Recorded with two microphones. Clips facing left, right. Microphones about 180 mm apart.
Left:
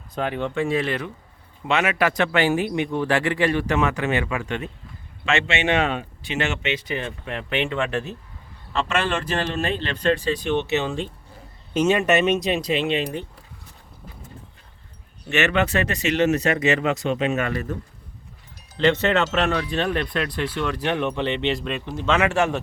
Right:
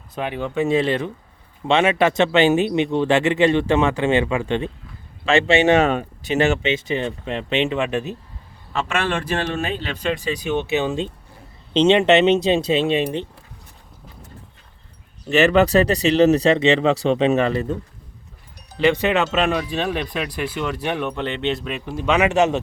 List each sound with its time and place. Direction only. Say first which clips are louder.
0.1 s speech: even; 5° right (ahead or behind)
0.5 s speech: right 8 dB; 25° right (ahead or behind)
15.3 s speech: right 6 dB; 35° right (ahead or behind)
18.8 s speech: right 2 dB; 15° right (ahead or behind)